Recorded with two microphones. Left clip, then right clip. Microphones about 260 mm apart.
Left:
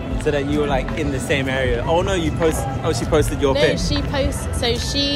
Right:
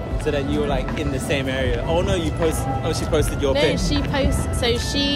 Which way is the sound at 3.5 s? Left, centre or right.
Centre.